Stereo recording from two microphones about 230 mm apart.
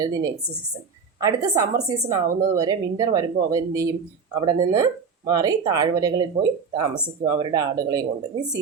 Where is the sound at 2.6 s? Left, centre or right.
Centre.